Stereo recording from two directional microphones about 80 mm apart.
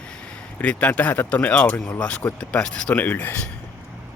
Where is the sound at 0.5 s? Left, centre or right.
Centre.